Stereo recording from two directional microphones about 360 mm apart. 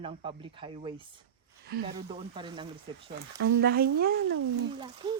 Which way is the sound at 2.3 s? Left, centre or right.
Centre.